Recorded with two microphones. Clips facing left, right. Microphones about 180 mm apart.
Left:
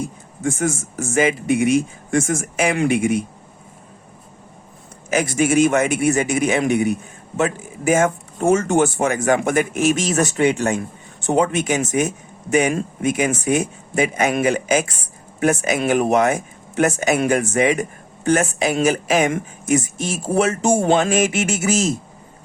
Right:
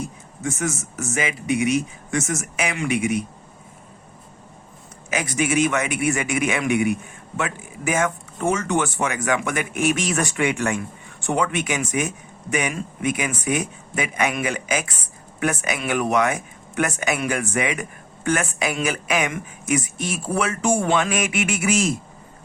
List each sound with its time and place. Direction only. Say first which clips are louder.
1.2 s speech: left 5 dB; 50° left (ahead or behind)
5.0 s speech: left 5 dB; 45° left (ahead or behind)